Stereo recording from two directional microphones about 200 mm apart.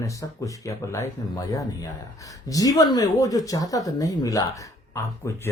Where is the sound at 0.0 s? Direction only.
15° left (ahead or behind).